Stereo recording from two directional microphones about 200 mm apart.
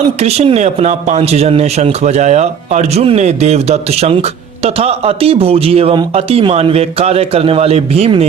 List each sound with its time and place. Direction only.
0.2 s a man's voice: 30° right (ahead or behind)